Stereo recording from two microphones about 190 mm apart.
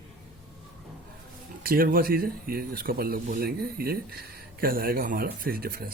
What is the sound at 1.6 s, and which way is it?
Speech, 50° right (ahead or behind).